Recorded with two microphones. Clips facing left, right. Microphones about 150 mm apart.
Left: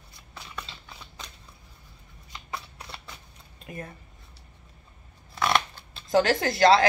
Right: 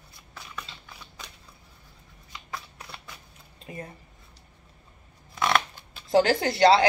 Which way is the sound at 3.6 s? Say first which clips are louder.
Even; 25° right (ahead or behind).